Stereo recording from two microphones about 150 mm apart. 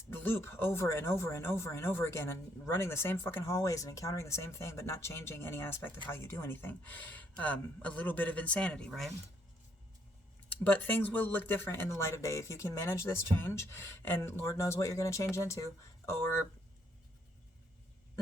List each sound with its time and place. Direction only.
0.1 s speech: 15° left (ahead or behind)
10.6 s speech: 10° left (ahead or behind)